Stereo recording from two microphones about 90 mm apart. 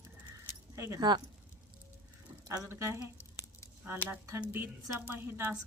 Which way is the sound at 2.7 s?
35° right (ahead or behind).